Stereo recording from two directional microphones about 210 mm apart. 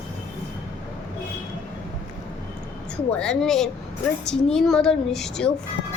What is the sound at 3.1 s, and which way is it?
Speech, 5° left (ahead or behind).